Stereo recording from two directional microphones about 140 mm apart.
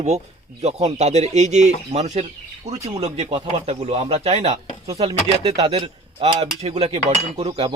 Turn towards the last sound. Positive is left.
turn(degrees=-35)  # may be behind; listen again after turning